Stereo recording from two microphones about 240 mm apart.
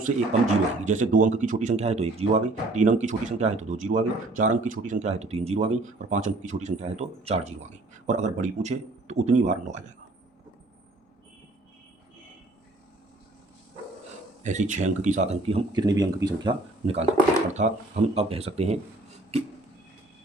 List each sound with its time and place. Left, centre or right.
0.0 s speech: right
14.4 s speech: right